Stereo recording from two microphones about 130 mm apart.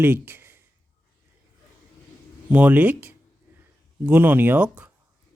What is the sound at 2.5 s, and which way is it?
Speech, 10° right (ahead or behind).